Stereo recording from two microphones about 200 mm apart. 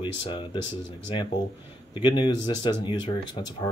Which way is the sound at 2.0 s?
20° left (ahead or behind).